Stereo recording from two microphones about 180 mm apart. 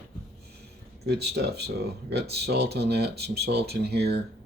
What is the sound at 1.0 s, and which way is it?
Speech, 65° right (ahead or behind).